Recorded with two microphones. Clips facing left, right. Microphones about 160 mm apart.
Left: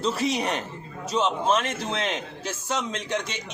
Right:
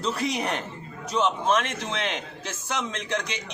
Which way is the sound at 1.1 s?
30° left (ahead or behind).